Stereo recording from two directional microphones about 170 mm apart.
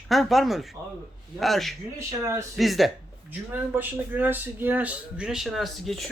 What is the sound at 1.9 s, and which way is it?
Speech, 15° right (ahead or behind).